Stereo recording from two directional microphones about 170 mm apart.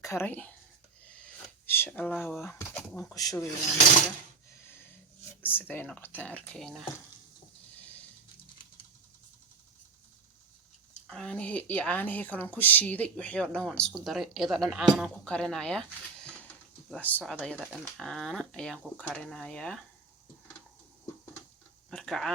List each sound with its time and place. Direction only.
0.0 s a woman's voice: 15° left (ahead or behind)
1.0 s a sound: 5° left (ahead or behind)
2.4 s speech: 10° left (ahead or behind)
5.4 s a woman's voice: 10° left (ahead or behind)
11.1 s a woman's voice: 5° left (ahead or behind)
16.9 s speech: 10° left (ahead or behind)
21.8 s a sound: 5° left (ahead or behind)